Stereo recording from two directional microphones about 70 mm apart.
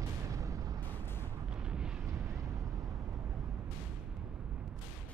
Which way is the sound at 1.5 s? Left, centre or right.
Centre.